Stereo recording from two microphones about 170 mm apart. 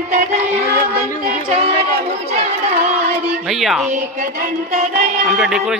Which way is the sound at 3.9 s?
45° right (ahead or behind).